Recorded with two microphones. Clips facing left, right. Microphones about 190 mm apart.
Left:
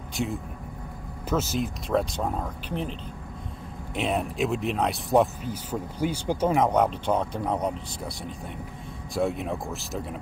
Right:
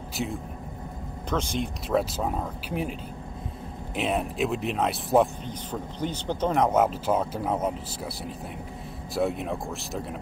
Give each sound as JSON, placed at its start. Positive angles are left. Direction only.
{"t": 0.2, "sound": "speech", "side_deg": 0}